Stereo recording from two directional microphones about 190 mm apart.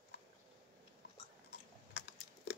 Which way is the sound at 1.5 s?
65° left (ahead or behind).